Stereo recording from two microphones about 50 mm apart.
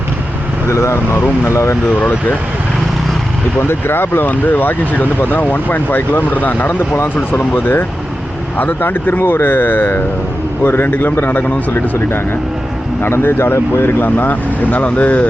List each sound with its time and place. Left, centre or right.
0.7 s speech: left
3.6 s speech: left
11.7 s speech: left